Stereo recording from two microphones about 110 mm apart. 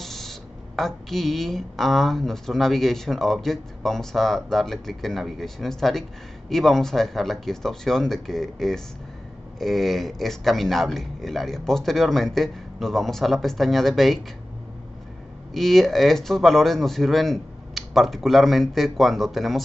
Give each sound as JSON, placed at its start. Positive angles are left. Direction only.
{"t": 0.0, "sound": "a woman's voice", "side_deg": 5}
{"t": 15.5, "sound": "a woman's voice", "side_deg": 5}